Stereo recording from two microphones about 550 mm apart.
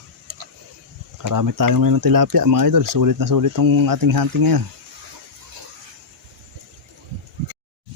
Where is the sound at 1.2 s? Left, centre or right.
Right.